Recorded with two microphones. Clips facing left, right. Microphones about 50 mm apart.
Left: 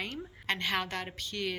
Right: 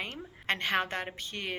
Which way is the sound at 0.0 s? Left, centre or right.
Right.